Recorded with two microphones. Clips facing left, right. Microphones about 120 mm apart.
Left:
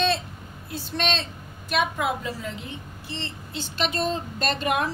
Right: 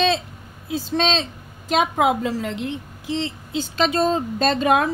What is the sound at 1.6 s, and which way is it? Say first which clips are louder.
A woman's voice: right 6 dB; 90° right.